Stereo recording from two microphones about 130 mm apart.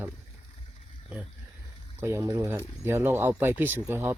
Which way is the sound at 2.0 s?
20° right (ahead or behind).